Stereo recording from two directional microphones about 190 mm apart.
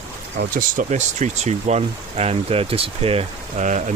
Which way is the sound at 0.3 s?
45° right (ahead or behind).